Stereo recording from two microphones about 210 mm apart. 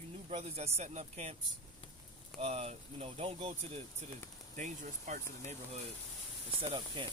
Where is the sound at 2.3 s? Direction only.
30° right (ahead or behind).